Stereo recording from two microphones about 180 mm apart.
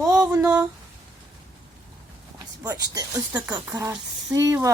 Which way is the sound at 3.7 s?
20° right (ahead or behind).